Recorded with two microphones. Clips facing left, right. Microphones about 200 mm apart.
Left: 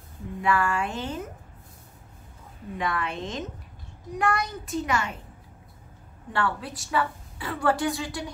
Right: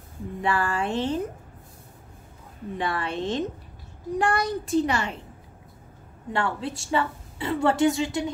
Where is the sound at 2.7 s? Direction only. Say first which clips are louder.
Right 1 dB; 30° right (ahead or behind).